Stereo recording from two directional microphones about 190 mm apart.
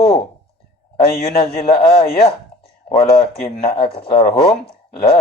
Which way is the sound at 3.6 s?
30° left (ahead or behind).